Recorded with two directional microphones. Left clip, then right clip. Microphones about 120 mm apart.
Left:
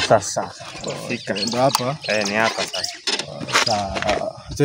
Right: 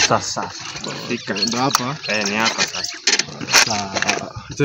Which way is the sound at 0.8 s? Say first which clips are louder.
Even; 40° left (ahead or behind).